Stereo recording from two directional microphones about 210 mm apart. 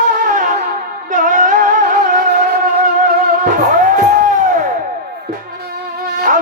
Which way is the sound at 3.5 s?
40° right (ahead or behind).